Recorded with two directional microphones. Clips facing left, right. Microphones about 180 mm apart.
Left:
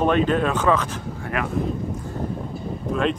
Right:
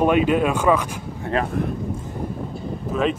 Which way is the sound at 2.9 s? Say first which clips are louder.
Right 1 dB; 5° right (ahead or behind).